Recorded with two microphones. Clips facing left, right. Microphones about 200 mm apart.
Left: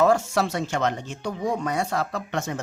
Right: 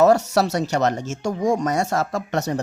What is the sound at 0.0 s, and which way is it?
Speech, 40° right (ahead or behind).